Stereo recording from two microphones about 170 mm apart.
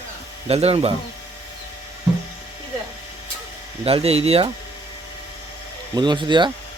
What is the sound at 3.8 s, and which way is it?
Speech, 35° right (ahead or behind).